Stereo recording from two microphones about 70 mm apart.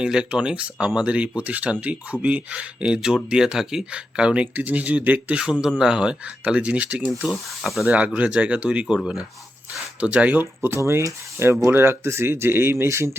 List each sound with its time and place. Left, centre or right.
0.0 s speech: centre
7.1 s speech: centre
7.9 s speech: right
10.0 s speech: centre
10.8 s speech: right